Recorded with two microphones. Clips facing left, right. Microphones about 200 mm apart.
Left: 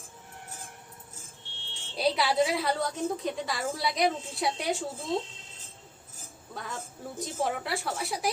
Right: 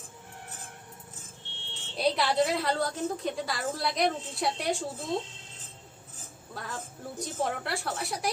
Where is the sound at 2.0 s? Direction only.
Centre (ahead or behind).